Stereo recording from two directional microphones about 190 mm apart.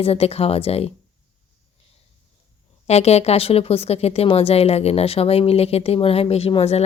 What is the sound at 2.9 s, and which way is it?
Speech, 35° left (ahead or behind).